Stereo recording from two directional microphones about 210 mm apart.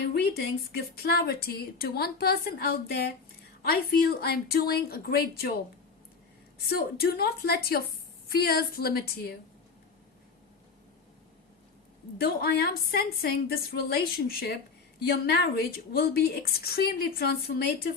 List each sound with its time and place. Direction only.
0.1 s a sound: 50° left (ahead or behind)
0.9 s a woman's voice: 50° left (ahead or behind)
6.7 s a woman's voice: 45° left (ahead or behind)
12.1 s a woman's voice: 50° left (ahead or behind)